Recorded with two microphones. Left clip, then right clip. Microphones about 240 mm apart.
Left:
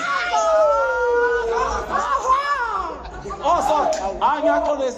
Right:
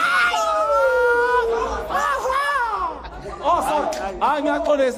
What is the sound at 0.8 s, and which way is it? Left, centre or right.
Howl, right.